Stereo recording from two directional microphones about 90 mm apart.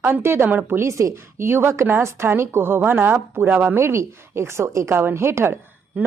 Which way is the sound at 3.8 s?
30° right (ahead or behind).